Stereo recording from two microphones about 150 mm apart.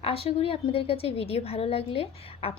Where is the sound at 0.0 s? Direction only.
40° left (ahead or behind).